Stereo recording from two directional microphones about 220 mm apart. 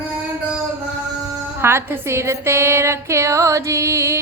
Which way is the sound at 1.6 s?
10° right (ahead or behind).